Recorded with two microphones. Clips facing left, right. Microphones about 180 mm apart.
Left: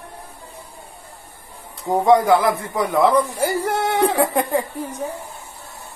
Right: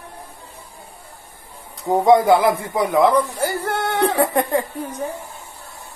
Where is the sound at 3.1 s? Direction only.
15° left (ahead or behind).